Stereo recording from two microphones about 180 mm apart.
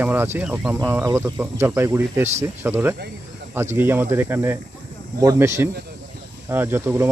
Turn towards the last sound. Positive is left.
turn(degrees=-15)  # may be behind; listen again after turning